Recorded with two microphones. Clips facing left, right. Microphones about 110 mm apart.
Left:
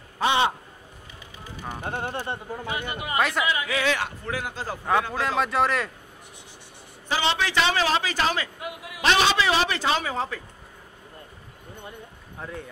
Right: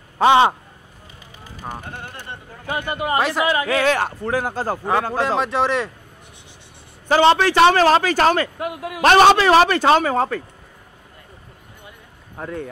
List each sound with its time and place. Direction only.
0.3 s a sound: 90° right
1.9 s speech: 45° left (ahead or behind)
2.7 s a man's voice: 50° right (ahead or behind)
3.2 s speech: 35° right (ahead or behind)
3.4 s a man's voice: 55° right (ahead or behind); by 5.4 s 35° right (ahead or behind)
5.4 s speech: centre (ahead or behind)
7.1 s a man's voice: 55° right (ahead or behind)
12.4 s speech: 60° right (ahead or behind)